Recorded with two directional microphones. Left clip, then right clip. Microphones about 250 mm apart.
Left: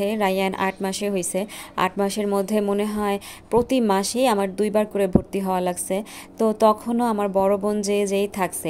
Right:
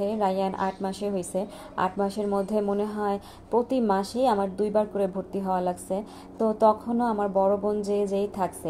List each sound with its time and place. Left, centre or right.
0.0 s a woman's voice: left